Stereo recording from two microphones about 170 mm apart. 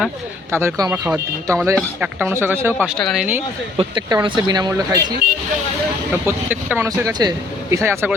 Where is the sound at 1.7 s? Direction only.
10° right (ahead or behind).